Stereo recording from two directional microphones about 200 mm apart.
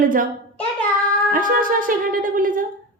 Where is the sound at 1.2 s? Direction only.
40° right (ahead or behind).